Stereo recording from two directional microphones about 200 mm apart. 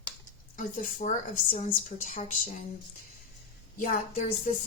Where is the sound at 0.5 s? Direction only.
40° left (ahead or behind).